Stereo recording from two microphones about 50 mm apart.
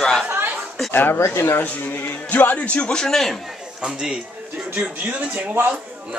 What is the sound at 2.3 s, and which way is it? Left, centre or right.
Speech, left.